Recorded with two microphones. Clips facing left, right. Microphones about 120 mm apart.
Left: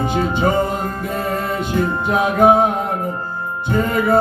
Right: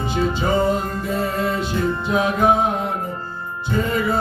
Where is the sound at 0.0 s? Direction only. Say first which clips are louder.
Left 4 dB; 50° left (ahead or behind).